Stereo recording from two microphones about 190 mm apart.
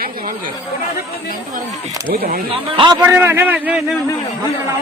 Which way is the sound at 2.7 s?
25° right (ahead or behind).